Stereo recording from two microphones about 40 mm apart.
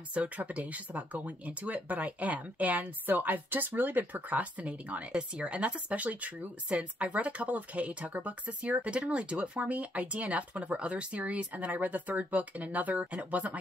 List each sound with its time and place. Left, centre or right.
0.2 s speech: right